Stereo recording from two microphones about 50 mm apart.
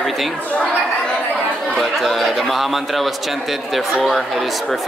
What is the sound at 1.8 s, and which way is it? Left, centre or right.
Speech, centre.